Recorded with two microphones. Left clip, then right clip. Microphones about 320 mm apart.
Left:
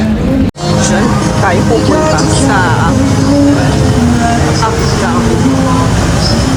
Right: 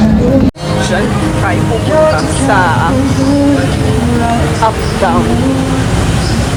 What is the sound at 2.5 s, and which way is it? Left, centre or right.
Speech, centre.